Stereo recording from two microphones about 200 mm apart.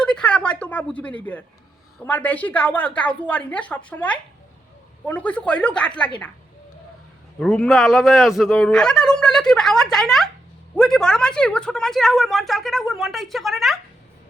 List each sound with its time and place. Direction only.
0.0 s a woman's voice: 5° left (ahead or behind)
7.3 s a woman's voice: 5° left (ahead or behind)